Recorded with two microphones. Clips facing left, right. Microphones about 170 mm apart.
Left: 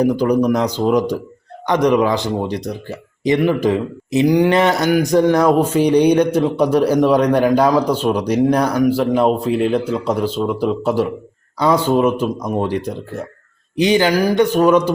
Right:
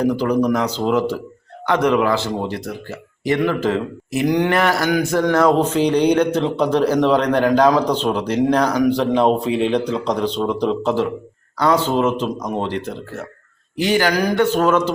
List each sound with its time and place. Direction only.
0.0 s speech: 15° left (ahead or behind)